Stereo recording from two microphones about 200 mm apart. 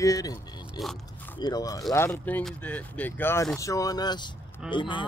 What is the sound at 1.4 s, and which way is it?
Speech, 20° left (ahead or behind).